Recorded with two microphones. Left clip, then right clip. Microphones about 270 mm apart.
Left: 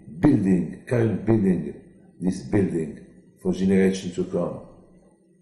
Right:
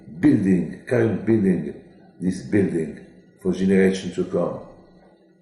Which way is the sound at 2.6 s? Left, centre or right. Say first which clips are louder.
Right 4 dB; right.